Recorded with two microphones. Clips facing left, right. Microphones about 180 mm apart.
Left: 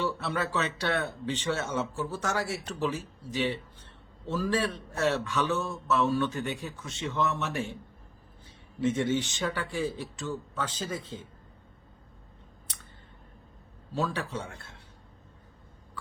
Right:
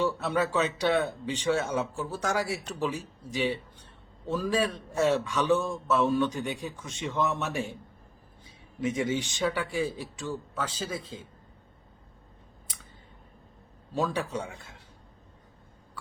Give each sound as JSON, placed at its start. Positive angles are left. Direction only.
{"t": 0.0, "sound": "a man's voice", "side_deg": -15}
{"t": 13.9, "sound": "a man's voice", "side_deg": -15}
{"t": 14.4, "sound": "a man's voice", "side_deg": 0}